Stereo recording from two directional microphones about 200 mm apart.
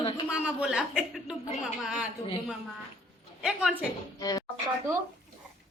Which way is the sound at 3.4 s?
5° right (ahead or behind).